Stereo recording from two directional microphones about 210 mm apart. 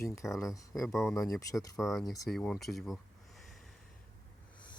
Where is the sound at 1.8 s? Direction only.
Centre (ahead or behind).